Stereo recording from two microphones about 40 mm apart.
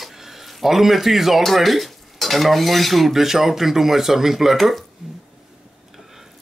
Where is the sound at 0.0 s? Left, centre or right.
Centre.